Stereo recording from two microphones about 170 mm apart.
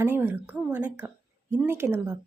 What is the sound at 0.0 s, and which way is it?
A woman's voice, 10° right (ahead or behind).